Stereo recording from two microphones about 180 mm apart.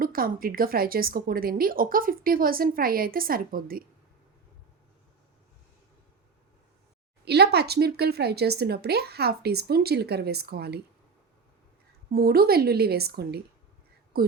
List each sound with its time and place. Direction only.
0.0 s a woman's voice: 50° right (ahead or behind)
7.3 s a woman's voice: 65° right (ahead or behind)
12.1 s a woman's voice: 60° right (ahead or behind)
14.1 s a sound: 60° right (ahead or behind)